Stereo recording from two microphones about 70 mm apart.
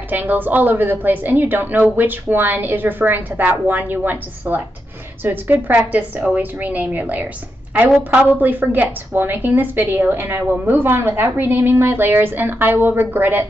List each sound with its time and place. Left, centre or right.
0.1 s a woman's voice: right